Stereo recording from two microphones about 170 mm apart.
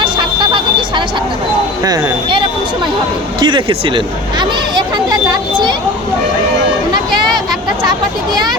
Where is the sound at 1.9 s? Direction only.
20° right (ahead or behind).